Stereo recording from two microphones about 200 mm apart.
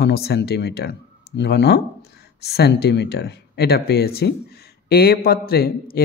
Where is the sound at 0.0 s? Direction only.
55° left (ahead or behind).